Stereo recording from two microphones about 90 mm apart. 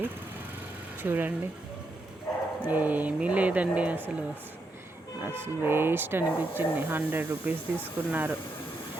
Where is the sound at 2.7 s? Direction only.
20° right (ahead or behind).